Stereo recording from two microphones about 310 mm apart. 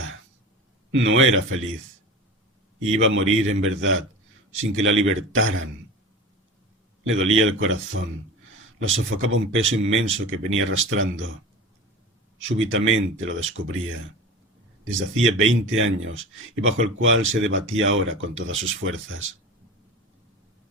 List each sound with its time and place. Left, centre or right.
0.9 s speech: right
2.8 s speech: right
7.1 s speech: right
8.8 s speech: right
13.1 s speech: right